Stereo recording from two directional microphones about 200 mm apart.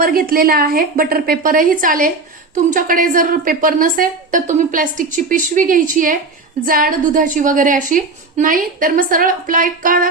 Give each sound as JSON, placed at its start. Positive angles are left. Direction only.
{"t": 0.0, "sound": "a woman's voice", "side_deg": -45}